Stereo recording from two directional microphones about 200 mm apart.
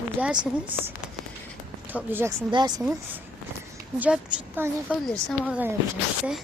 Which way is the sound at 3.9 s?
10° right (ahead or behind).